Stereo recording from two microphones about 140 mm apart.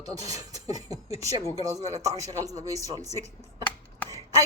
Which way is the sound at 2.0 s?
25° right (ahead or behind).